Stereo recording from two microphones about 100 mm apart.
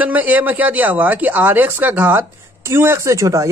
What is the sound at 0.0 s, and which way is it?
Speech, 15° right (ahead or behind).